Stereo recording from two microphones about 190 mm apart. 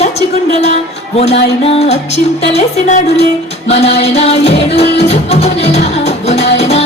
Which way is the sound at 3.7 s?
35° left (ahead or behind).